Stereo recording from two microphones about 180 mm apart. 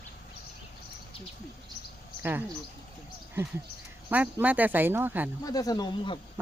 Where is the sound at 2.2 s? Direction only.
10° right (ahead or behind).